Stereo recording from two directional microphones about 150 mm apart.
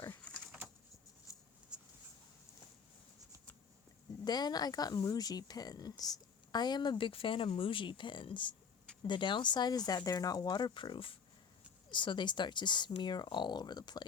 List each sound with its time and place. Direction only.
0.0 s bird: 15° left (ahead or behind)
1.3 s a sound: 20° left (ahead or behind)
4.2 s speech: 25° left (ahead or behind)